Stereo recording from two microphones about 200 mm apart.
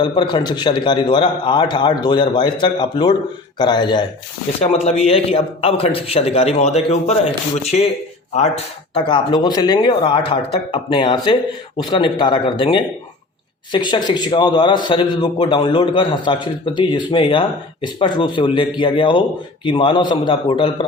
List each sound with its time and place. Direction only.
0.0 s a man's voice: 20° left (ahead or behind)
9.0 s a man's voice: 25° left (ahead or behind)